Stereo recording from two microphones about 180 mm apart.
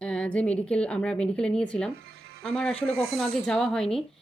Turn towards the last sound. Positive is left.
turn(degrees=5)  # may be behind; listen again after turning